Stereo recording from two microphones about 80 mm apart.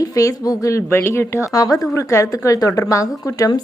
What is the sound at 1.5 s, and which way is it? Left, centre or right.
A woman's voice, left.